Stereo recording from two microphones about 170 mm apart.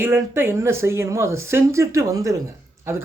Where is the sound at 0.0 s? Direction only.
15° right (ahead or behind).